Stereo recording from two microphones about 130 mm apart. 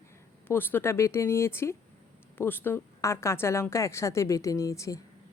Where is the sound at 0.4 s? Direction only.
15° left (ahead or behind).